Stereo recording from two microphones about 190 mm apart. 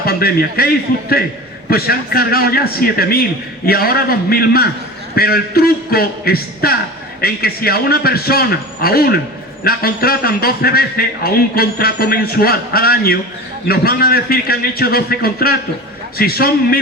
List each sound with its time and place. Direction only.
0.0 s a man's voice: 55° left (ahead or behind)
1.7 s a man's voice: 55° left (ahead or behind)